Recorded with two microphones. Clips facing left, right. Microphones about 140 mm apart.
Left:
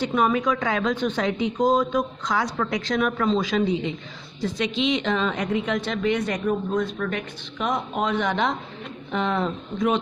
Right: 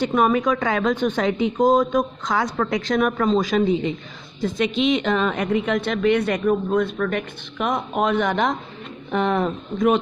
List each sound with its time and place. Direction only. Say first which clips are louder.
0.0 s a woman's voice: right 3 dB; 50° right (ahead or behind)